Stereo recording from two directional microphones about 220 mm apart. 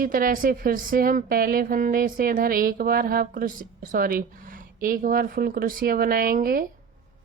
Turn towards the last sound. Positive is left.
turn(degrees=-40)  # may be behind; listen again after turning